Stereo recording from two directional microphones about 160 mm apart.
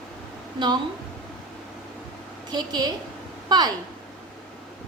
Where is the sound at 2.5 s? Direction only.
25° right (ahead or behind).